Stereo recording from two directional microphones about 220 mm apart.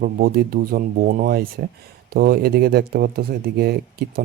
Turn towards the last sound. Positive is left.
turn(degrees=-45)  # may be behind; listen again after turning